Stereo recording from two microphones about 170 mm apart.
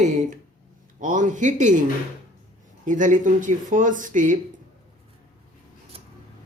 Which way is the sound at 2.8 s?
50° right (ahead or behind).